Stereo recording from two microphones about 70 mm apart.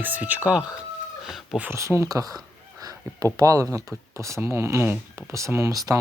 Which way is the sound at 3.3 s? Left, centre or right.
Right.